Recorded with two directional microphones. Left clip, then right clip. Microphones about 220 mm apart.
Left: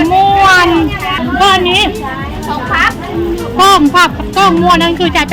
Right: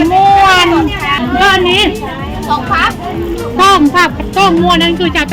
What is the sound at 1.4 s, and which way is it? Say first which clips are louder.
Speech: left 1 dB; centre (ahead or behind).